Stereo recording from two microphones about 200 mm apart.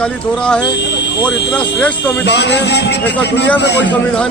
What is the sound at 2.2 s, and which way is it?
A man's voice, 60° left (ahead or behind).